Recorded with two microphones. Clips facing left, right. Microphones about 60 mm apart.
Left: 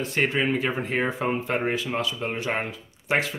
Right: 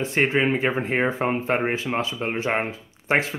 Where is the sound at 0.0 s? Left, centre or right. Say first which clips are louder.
Right 3 dB; right.